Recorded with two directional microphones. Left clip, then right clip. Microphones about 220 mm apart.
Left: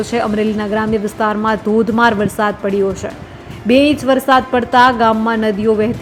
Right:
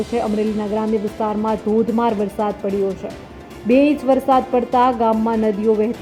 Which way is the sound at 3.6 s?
10° left (ahead or behind).